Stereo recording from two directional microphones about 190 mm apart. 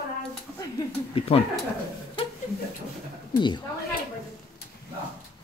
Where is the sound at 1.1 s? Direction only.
30° left (ahead or behind).